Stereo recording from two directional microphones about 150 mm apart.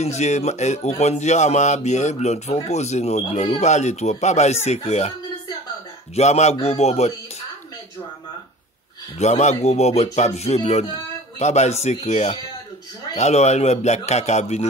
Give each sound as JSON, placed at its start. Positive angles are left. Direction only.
{"t": 0.0, "sound": "speech", "side_deg": 50}
{"t": 6.1, "sound": "speech", "side_deg": 45}
{"t": 9.2, "sound": "speech", "side_deg": 50}